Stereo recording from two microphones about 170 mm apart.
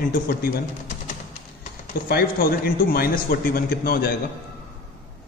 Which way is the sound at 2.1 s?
60° left (ahead or behind).